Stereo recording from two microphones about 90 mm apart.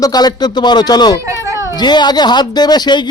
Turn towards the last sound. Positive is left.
turn(degrees=55)  # may be behind; listen again after turning